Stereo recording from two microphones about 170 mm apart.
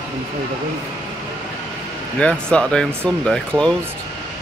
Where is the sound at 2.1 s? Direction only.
5° left (ahead or behind).